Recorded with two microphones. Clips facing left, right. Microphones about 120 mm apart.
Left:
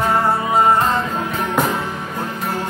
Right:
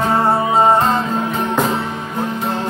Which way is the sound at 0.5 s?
30° right (ahead or behind).